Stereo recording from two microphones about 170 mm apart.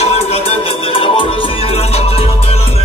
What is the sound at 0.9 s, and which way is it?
Music, 35° left (ahead or behind).